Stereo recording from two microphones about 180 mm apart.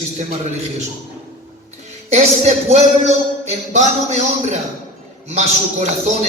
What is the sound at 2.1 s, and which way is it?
Speech, 40° right (ahead or behind).